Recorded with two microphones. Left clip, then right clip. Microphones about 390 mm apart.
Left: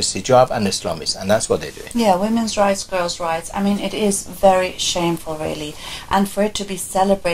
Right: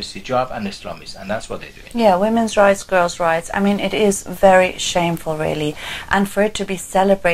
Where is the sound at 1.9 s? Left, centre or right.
Right.